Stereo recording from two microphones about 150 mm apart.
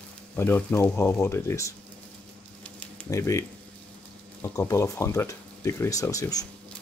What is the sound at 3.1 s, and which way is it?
Speech, 20° left (ahead or behind).